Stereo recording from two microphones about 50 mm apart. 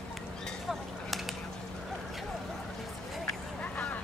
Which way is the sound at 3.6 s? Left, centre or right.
Left.